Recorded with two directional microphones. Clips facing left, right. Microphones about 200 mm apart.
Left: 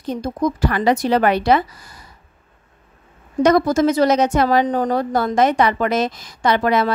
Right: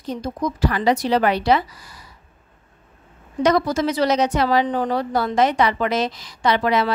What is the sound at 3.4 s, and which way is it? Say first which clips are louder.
A woman's voice: left 4 dB; 50° left (ahead or behind).